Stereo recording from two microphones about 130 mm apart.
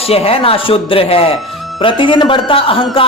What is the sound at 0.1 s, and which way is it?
Speech, 50° left (ahead or behind).